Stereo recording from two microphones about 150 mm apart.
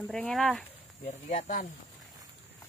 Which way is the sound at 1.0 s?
60° left (ahead or behind).